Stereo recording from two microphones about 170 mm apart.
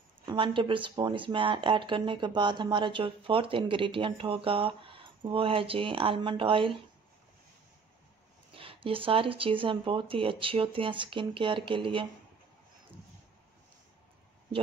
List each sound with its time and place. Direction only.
0.3 s speech: 30° right (ahead or behind)
8.5 s speech: 30° right (ahead or behind)